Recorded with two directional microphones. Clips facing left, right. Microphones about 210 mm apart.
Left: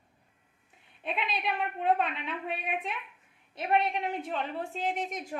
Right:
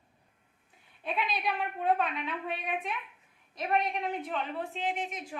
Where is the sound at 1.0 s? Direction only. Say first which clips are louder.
Right 1 dB; 25° left (ahead or behind).